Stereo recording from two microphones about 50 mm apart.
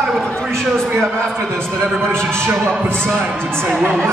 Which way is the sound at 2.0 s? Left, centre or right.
Right.